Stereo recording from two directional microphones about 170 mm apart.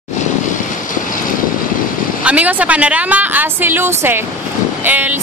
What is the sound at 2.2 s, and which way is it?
Speech, 10° right (ahead or behind).